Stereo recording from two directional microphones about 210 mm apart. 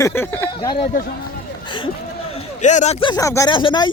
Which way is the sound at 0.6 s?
25° left (ahead or behind).